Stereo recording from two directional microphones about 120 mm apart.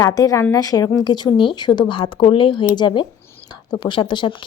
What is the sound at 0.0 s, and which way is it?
A woman's voice, 30° left (ahead or behind).